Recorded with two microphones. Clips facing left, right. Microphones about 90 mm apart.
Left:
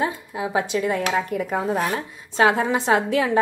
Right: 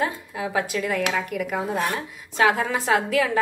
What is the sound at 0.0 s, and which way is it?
A woman's voice, 20° left (ahead or behind).